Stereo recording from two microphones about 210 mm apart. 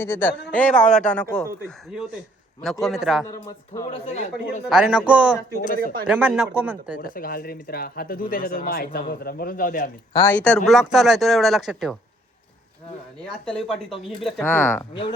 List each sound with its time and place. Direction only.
0.0 s speech: 10° left (ahead or behind)
2.8 s speech: centre (ahead or behind)
3.2 s speech: 15° left (ahead or behind)
3.8 s speech: 30° left (ahead or behind)
4.7 s speech: 5° right (ahead or behind)
5.5 s speech: 40° left (ahead or behind)
6.1 s speech: 5° right (ahead or behind)
7.0 s a man's voice: 45° left (ahead or behind)
10.2 s speech: 10° left (ahead or behind)
13.4 s speech: centre (ahead or behind)